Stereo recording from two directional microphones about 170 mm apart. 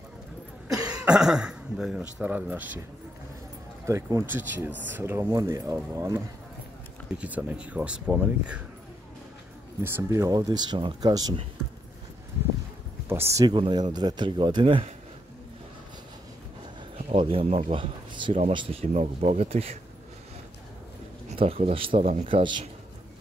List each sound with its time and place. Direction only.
0.8 s speech: 5° right (ahead or behind)
3.8 s speech: 15° right (ahead or behind)
7.2 s speech: 10° right (ahead or behind)
9.8 s speech: 15° right (ahead or behind)
13.1 s speech: 15° right (ahead or behind)
17.1 s speech: 35° right (ahead or behind)
21.3 s speech: 35° right (ahead or behind)